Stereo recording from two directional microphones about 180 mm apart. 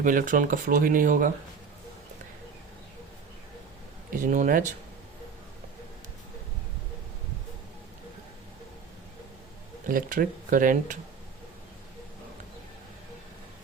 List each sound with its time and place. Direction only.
0.0 s speech: 50° right (ahead or behind)
4.1 s speech: 45° right (ahead or behind)
9.9 s speech: 50° right (ahead or behind)